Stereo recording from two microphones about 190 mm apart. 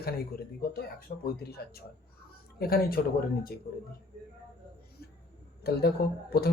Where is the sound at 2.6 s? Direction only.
50° left (ahead or behind).